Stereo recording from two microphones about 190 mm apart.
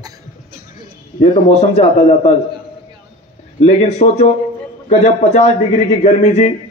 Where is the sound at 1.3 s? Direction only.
35° left (ahead or behind).